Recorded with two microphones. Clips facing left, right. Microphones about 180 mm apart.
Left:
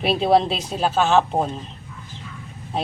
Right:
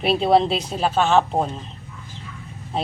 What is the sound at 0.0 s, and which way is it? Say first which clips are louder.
Speech: even; centre (ahead or behind).